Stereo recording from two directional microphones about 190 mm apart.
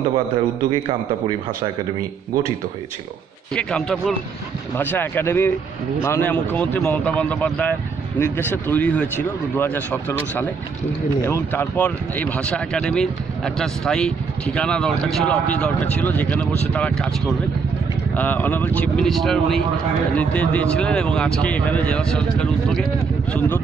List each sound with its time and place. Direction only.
0.7 s a man's voice: 30° right (ahead or behind)
3.5 s speech: 5° left (ahead or behind)